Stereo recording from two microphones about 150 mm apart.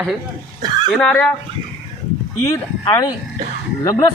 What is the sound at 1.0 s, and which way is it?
Speech, 5° left (ahead or behind).